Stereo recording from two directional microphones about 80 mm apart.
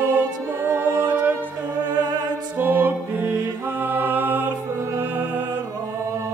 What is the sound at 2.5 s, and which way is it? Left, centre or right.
Music, right.